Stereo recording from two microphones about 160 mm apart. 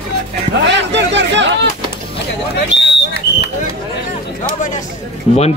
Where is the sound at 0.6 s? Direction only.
90° right.